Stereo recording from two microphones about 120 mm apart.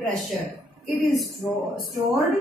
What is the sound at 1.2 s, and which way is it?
Speech, centre (ahead or behind).